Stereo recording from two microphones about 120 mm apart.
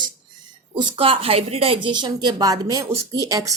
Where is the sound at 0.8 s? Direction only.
50° right (ahead or behind).